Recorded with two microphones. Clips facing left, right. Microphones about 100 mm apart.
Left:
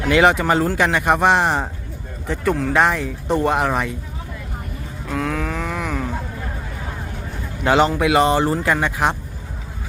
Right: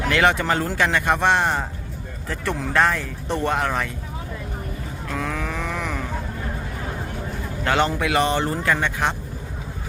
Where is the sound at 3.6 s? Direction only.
25° left (ahead or behind).